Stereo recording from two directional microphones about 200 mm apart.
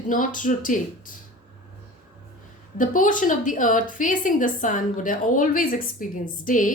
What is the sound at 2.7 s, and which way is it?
A woman's voice, 40° left (ahead or behind).